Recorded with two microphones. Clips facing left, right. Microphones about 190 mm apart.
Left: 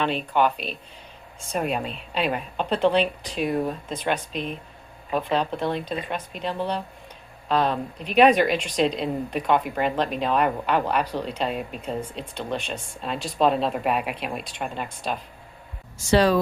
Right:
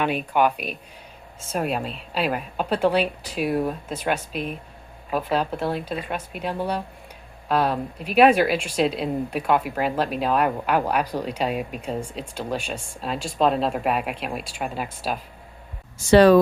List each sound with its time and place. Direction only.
0.0 s a woman's voice: 10° right (ahead or behind)
16.0 s speech: 55° right (ahead or behind)